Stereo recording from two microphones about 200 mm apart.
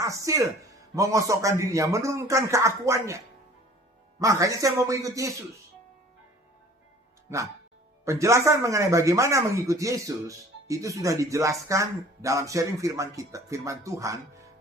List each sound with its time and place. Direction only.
0.0 s speech: 15° right (ahead or behind)
4.2 s speech: 15° right (ahead or behind)
8.0 s speech: 15° right (ahead or behind)